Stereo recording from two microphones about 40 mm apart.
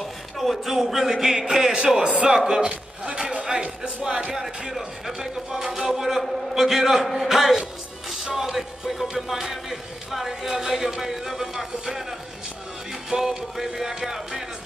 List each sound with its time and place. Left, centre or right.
0.0 s speech: centre; by 4.3 s right
4.3 s music: centre
10.5 s music: centre